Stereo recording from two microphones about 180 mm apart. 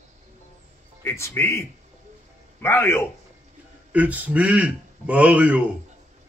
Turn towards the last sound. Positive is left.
turn(degrees=-10)  # may be behind; listen again after turning